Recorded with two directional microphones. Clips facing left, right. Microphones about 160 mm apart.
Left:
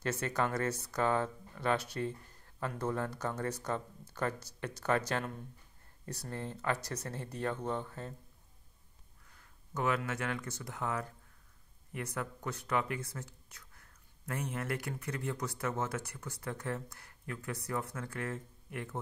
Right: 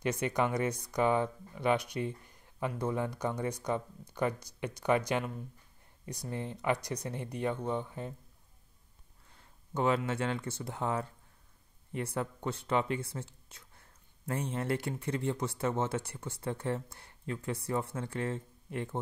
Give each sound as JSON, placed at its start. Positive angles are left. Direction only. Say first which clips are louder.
{"t": 0.0, "sound": "speech", "louder": "right 3 dB", "side_deg": -15}
{"t": 9.3, "sound": "speech", "louder": "right 4 dB", "side_deg": -30}